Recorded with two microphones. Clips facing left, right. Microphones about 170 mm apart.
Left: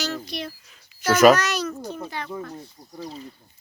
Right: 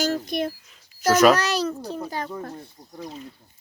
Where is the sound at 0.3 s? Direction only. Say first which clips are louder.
Right 7 dB; 50° right (ahead or behind).